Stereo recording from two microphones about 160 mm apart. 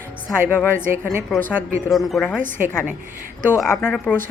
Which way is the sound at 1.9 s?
Centre (ahead or behind).